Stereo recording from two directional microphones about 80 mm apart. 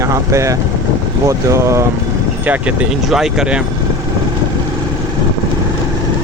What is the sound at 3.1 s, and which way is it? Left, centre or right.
Speech, centre.